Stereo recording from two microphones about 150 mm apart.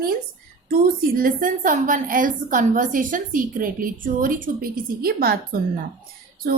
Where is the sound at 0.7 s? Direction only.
75° right (ahead or behind).